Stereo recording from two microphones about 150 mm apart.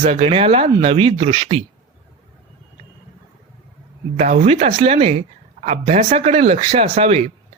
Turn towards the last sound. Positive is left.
turn(degrees=-40)  # may be behind; listen again after turning